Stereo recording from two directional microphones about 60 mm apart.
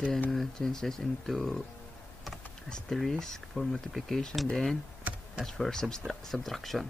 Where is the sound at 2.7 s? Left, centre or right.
Centre.